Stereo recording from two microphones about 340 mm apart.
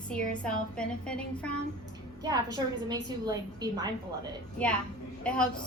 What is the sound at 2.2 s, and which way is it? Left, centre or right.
A woman's voice, centre.